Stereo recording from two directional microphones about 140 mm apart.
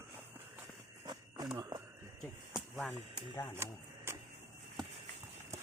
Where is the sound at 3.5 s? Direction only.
20° right (ahead or behind).